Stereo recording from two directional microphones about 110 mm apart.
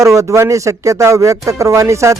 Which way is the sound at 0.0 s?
30° right (ahead or behind).